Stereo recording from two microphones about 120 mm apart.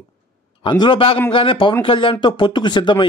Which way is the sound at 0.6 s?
40° left (ahead or behind).